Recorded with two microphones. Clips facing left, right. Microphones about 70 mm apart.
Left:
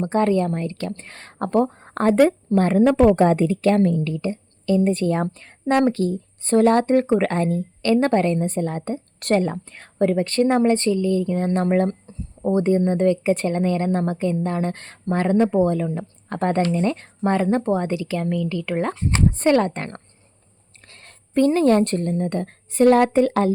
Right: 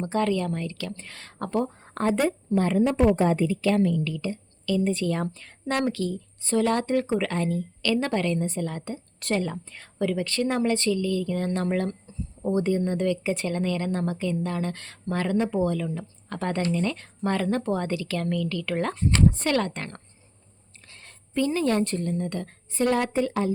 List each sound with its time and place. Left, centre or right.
0.0 s a woman's voice: left
2.1 s a woman's voice: left
2.8 s a woman's voice: left
4.8 s a woman's voice: left
5.0 s a woman's voice: left
20.8 s a woman's voice: left